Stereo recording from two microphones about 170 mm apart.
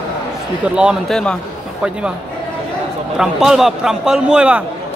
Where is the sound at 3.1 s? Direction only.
5° right (ahead or behind).